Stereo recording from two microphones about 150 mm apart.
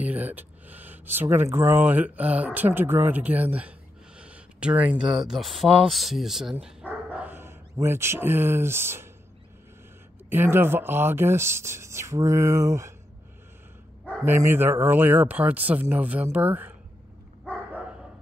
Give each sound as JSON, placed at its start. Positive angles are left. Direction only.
{"t": 0.0, "sound": "speech", "side_deg": -10}
{"t": 4.2, "sound": "a sound", "side_deg": -5}
{"t": 5.3, "sound": "speech", "side_deg": 0}
{"t": 10.3, "sound": "speech", "side_deg": -15}
{"t": 14.2, "sound": "speech", "side_deg": -15}